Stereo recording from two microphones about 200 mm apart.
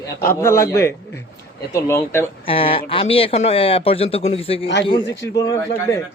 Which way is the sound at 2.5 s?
30° left (ahead or behind).